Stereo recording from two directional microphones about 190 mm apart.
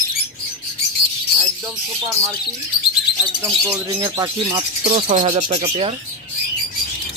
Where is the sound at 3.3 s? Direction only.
20° right (ahead or behind).